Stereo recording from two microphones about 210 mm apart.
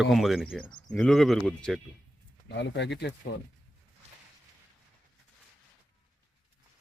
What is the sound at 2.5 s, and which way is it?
Speech, 55° left (ahead or behind).